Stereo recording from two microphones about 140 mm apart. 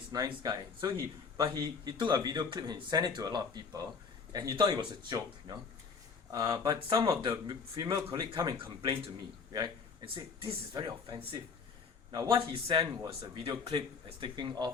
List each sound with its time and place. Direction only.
0.1 s a man's voice: 30° right (ahead or behind)
10.2 s speech: 35° right (ahead or behind)